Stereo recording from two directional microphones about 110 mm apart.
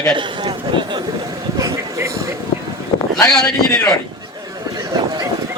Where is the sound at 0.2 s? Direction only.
45° right (ahead or behind).